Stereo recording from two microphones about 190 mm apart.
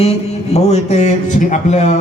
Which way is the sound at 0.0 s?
35° left (ahead or behind).